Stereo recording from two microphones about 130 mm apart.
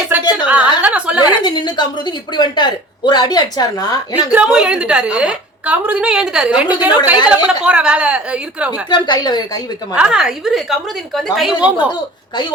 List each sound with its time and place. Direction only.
0.1 s a sound: 15° right (ahead or behind)
0.8 s chuckle: 10° right (ahead or behind)
1.2 s a woman's voice: 35° left (ahead or behind)
4.3 s a woman's voice: 10° right (ahead or behind)
8.9 s a woman's voice: 35° left (ahead or behind)
9.9 s a woman's voice: 5° right (ahead or behind)